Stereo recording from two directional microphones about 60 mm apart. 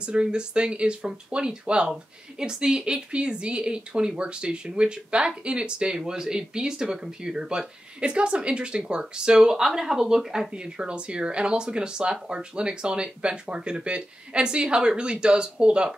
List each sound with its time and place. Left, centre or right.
0.0 s speech: centre